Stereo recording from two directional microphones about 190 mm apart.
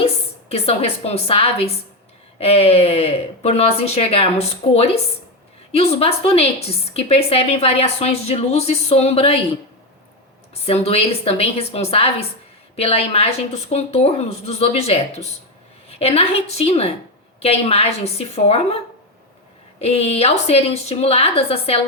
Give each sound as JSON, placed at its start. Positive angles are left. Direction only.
{"t": 0.0, "sound": "a woman's voice", "side_deg": 30}
{"t": 10.5, "sound": "a woman's voice", "side_deg": 35}
{"t": 19.8, "sound": "a woman's voice", "side_deg": 35}